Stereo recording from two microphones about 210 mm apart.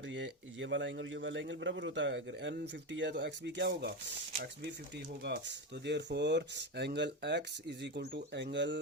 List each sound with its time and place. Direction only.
0.1 s a man's voice: 60° right (ahead or behind)
5.2 s a man's voice: 55° right (ahead or behind)